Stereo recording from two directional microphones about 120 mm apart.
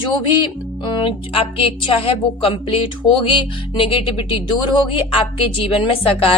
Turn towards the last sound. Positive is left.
turn(degrees=50)  # may be behind; listen again after turning